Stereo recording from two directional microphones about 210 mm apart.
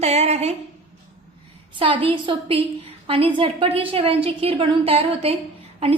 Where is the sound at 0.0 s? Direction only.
30° right (ahead or behind).